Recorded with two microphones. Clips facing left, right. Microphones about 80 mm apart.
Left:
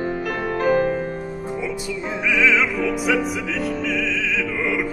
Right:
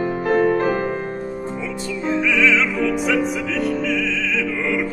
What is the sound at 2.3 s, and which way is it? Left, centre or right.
Music, centre.